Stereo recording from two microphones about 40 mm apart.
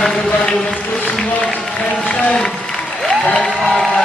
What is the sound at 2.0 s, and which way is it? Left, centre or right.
Speech, left.